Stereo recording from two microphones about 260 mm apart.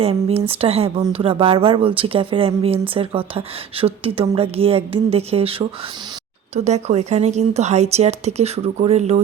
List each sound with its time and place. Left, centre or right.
0.0 s a woman's voice: right